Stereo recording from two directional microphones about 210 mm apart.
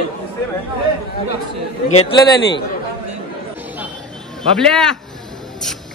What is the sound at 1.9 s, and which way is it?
Speech, 25° left (ahead or behind).